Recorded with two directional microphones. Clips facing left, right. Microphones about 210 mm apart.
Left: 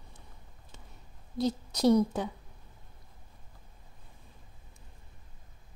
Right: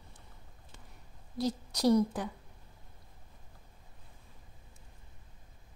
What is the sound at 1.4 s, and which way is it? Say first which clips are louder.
Speech: left 3 dB; 20° left (ahead or behind).